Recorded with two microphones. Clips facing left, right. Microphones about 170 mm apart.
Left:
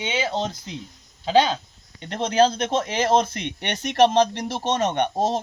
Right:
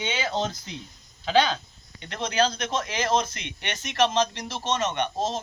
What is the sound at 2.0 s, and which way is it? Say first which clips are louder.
Speech: left 6 dB; 45° left (ahead or behind).